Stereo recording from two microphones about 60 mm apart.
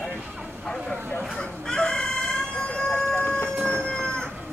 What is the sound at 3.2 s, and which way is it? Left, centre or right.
Emergency vehicle, left.